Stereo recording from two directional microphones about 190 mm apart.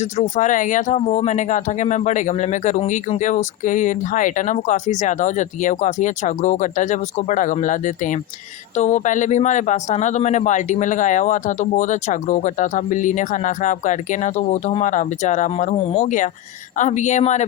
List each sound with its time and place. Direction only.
0.0 s speech: 40° left (ahead or behind)